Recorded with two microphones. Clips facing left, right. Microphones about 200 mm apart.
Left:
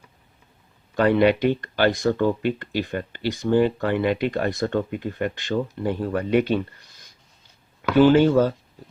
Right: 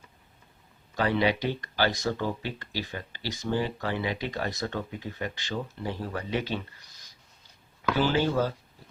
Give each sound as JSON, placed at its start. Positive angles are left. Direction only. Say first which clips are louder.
{"t": 0.9, "sound": "speech", "louder": "left 8 dB", "side_deg": 55}
{"t": 7.9, "sound": "speech", "louder": "left 11 dB", "side_deg": 60}